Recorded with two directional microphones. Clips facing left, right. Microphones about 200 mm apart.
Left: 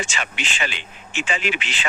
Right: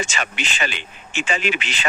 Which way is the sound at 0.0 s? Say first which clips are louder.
Right 2 dB; 40° right (ahead or behind).